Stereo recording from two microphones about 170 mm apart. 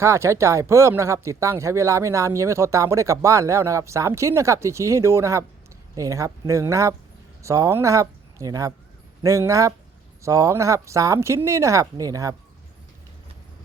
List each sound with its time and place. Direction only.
0.0 s speech: 15° right (ahead or behind)